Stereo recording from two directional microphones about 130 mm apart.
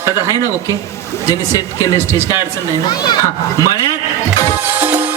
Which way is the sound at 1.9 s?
20° right (ahead or behind).